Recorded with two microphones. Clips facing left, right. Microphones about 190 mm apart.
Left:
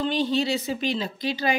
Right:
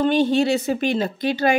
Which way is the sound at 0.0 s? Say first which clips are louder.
Right 6 dB; 55° right (ahead or behind).